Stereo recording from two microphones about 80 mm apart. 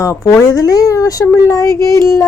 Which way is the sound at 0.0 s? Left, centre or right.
Left.